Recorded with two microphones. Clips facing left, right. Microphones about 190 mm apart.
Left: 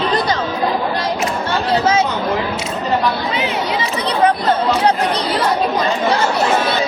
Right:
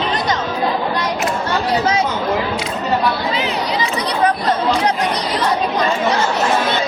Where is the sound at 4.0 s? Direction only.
25° left (ahead or behind).